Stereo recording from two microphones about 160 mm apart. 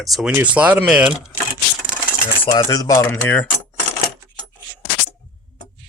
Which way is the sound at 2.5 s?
20° left (ahead or behind).